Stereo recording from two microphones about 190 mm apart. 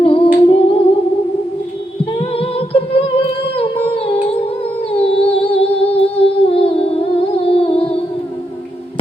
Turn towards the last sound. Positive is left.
turn(degrees=30)  # may be behind; listen again after turning